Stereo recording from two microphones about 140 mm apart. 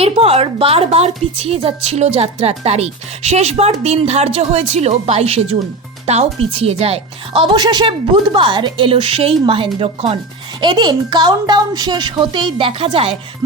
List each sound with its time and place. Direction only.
0.0 s a woman's voice: 45° right (ahead or behind)
10.6 s a woman's voice: 30° right (ahead or behind)